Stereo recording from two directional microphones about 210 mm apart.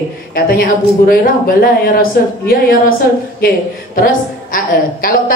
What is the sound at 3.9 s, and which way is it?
A woman's voice, 40° left (ahead or behind).